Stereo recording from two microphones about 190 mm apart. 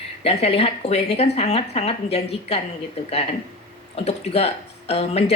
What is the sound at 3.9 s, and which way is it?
A woman's voice, 30° left (ahead or behind).